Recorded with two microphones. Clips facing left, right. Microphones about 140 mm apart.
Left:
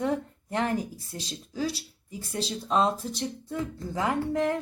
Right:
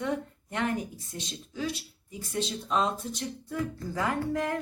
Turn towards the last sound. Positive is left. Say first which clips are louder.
# left 3 dB
turn(degrees=25)  # may be behind; listen again after turning